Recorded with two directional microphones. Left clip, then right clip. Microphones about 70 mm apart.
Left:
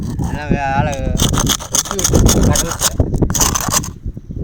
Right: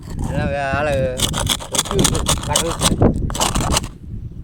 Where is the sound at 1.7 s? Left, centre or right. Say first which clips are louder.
Left 1 dB; left.